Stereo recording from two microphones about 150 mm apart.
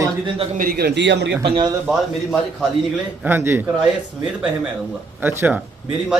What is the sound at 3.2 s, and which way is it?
Speech, 15° right (ahead or behind).